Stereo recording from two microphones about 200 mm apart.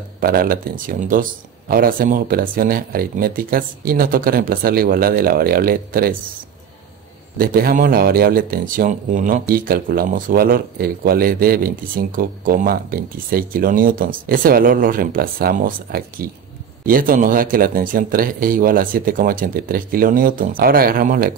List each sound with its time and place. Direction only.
0.2 s speech: 45° right (ahead or behind)
7.3 s speech: 45° right (ahead or behind)